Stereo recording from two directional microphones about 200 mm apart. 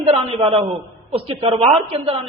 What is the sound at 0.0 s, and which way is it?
A man's voice, 30° right (ahead or behind).